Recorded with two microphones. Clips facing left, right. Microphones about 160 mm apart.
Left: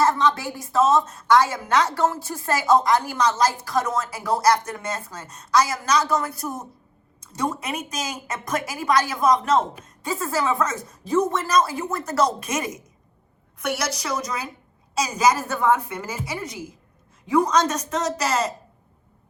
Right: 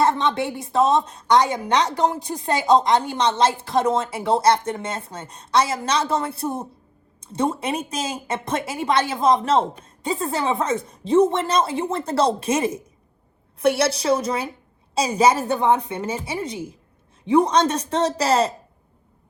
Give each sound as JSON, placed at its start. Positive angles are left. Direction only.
{"t": 0.0, "sound": "a woman's voice", "side_deg": -25}